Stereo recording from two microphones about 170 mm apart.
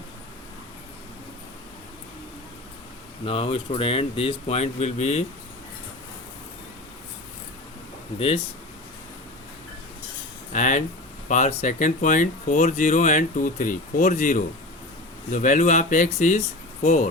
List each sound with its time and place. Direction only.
3.2 s speech: 35° left (ahead or behind)
10.5 s speech: 45° left (ahead or behind)